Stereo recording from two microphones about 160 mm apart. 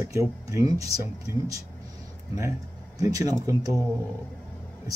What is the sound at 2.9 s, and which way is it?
Speech, 20° right (ahead or behind).